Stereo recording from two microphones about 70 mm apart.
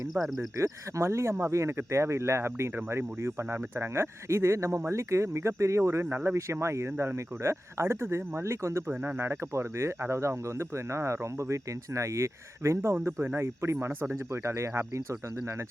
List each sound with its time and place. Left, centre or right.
0.1 s speech: centre
0.5 s speech: right